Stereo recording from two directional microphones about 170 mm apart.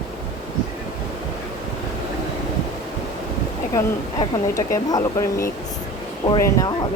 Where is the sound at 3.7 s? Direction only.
20° left (ahead or behind).